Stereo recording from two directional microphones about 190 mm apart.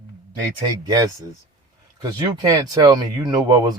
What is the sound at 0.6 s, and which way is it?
Speech, 20° right (ahead or behind).